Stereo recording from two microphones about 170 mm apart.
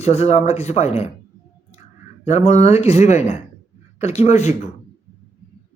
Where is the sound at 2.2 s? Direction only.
40° left (ahead or behind).